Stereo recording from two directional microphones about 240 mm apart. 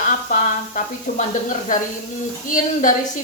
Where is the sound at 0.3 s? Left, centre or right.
Left.